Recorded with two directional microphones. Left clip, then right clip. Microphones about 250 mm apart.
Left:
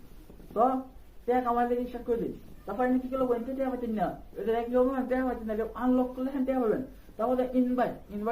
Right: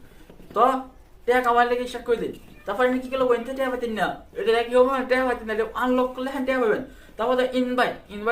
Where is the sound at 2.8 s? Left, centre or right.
Centre.